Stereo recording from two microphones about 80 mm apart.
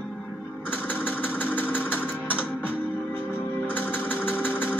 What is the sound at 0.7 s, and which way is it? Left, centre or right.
Sewing machine, left.